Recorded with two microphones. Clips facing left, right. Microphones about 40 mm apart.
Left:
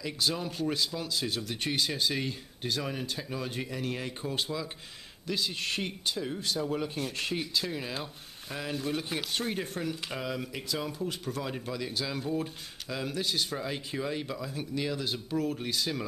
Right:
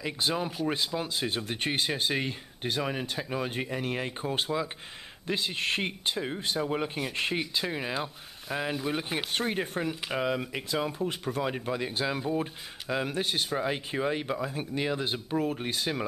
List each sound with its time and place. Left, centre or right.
0.0 s speech: right